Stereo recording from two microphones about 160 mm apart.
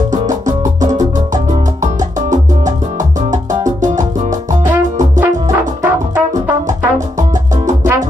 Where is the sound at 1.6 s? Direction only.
50° right (ahead or behind).